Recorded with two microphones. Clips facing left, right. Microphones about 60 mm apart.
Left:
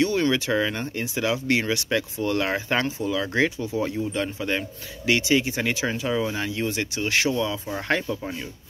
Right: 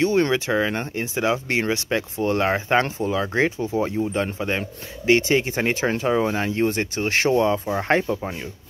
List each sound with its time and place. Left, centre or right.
0.0 s speech: right
7.6 s speech: right